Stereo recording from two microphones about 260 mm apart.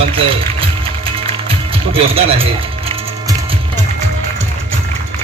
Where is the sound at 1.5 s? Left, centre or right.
Right.